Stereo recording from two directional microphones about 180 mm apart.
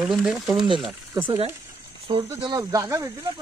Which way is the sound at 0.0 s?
Centre (ahead or behind).